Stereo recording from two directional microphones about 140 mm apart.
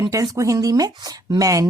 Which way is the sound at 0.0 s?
25° right (ahead or behind).